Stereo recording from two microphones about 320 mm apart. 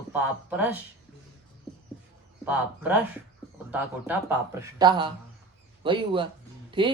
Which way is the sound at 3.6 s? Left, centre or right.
Centre.